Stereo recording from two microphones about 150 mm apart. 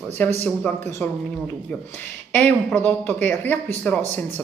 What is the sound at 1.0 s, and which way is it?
Speech, 10° left (ahead or behind).